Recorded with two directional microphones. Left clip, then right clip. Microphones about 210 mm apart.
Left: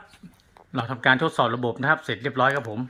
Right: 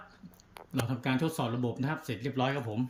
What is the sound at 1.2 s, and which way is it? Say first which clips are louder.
Speech: left 11 dB; 5° left (ahead or behind).